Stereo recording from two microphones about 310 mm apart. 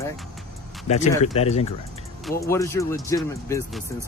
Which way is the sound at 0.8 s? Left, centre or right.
Left.